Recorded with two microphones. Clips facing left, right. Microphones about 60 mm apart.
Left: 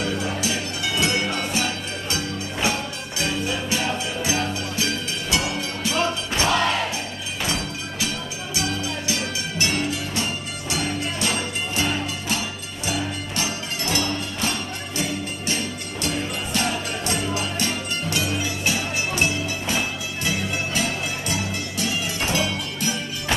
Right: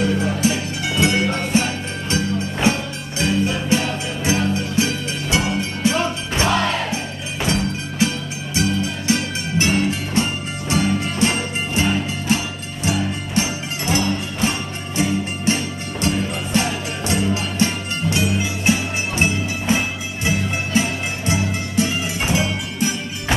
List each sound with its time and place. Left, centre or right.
0.2 s music: right